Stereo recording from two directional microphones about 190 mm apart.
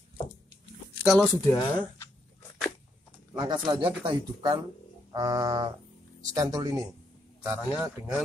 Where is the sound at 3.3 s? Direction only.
25° right (ahead or behind).